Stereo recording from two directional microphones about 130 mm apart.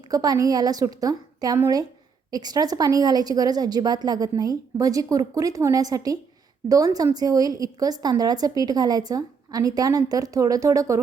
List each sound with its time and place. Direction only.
0.1 s a woman's voice: 30° right (ahead or behind)